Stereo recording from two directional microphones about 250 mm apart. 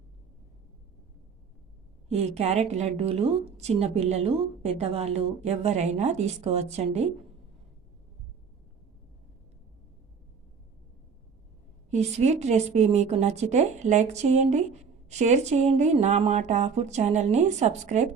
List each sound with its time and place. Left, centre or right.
2.0 s a woman's voice: right
11.9 s a woman's voice: right